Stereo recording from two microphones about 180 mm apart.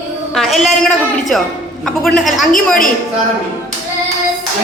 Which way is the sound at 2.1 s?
Centre (ahead or behind).